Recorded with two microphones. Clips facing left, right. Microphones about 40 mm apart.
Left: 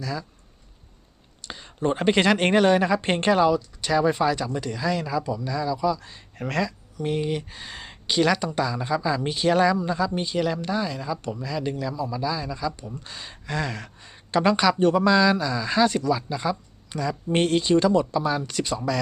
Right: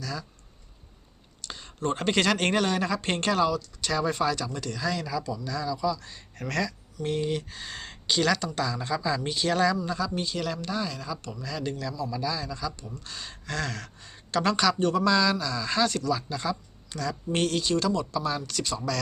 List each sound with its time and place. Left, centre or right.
0.0 s speech: centre
1.4 s speech: centre